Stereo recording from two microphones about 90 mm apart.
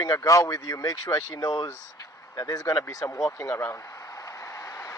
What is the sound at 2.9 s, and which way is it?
Vehicle, 35° left (ahead or behind).